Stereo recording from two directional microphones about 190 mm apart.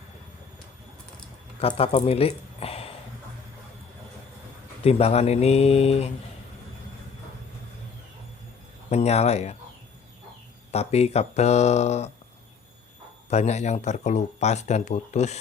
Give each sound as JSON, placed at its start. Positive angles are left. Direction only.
{"t": 1.5, "sound": "speech", "side_deg": 30}
{"t": 4.8, "sound": "speech", "side_deg": 30}
{"t": 8.9, "sound": "speech", "side_deg": 35}
{"t": 10.7, "sound": "speech", "side_deg": 35}
{"t": 13.3, "sound": "speech", "side_deg": 35}